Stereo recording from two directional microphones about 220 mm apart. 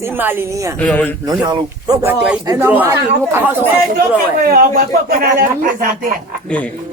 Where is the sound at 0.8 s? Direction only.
5° left (ahead or behind).